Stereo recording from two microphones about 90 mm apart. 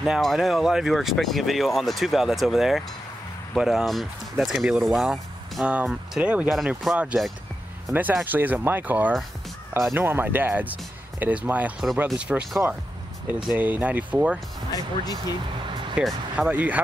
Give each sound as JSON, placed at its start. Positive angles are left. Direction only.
{"t": 0.0, "sound": "speech", "side_deg": 0}
{"t": 6.5, "sound": "speech", "side_deg": -5}
{"t": 13.6, "sound": "speech", "side_deg": -20}
{"t": 14.7, "sound": "speech", "side_deg": 45}
{"t": 16.0, "sound": "speech", "side_deg": -15}